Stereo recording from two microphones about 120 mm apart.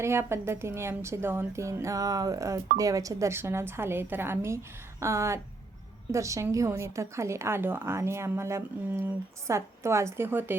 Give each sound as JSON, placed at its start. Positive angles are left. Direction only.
{"t": 0.0, "sound": "a woman's voice", "side_deg": -20}